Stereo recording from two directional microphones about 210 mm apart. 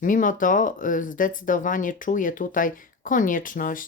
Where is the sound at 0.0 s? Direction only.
40° left (ahead or behind).